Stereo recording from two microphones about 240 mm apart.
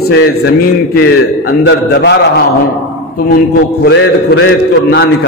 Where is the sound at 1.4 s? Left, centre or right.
Left.